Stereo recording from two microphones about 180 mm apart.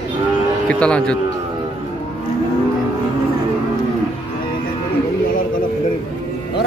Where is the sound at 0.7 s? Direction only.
5° left (ahead or behind).